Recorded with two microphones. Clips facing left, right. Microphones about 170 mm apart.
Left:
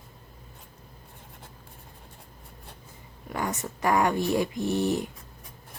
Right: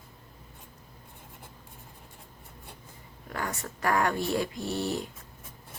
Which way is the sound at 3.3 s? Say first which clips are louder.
Left 4 dB; 20° left (ahead or behind).